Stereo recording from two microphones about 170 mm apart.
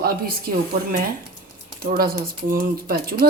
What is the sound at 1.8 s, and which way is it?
Speech, 60° right (ahead or behind).